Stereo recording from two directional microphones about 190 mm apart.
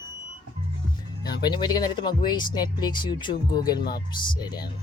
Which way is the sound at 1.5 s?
20° left (ahead or behind).